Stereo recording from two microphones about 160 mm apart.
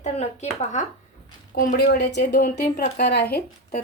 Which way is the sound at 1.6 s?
70° left (ahead or behind).